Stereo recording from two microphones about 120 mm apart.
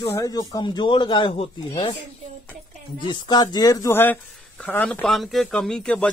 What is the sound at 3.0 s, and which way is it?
A man's voice, 35° left (ahead or behind).